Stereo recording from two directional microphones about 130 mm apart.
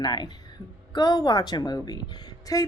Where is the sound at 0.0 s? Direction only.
35° left (ahead or behind).